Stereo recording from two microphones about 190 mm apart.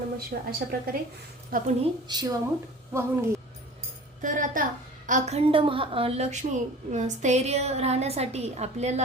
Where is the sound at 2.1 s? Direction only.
20° right (ahead or behind).